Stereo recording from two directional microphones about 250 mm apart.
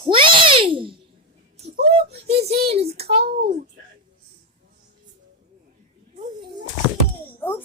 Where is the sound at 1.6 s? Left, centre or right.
Right.